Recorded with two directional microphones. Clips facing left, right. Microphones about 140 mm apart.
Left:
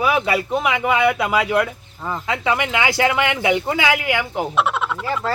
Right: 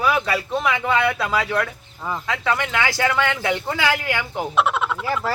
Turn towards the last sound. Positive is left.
turn(degrees=0)  # may be behind; listen again after turning